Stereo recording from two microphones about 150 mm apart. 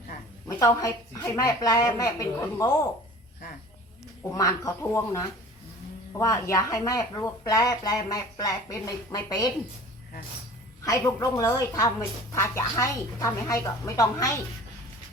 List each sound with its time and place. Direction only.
0.4 s a woman's voice: 20° left (ahead or behind)
4.2 s a woman's voice: 20° left (ahead or behind)
10.8 s a woman's voice: 20° left (ahead or behind)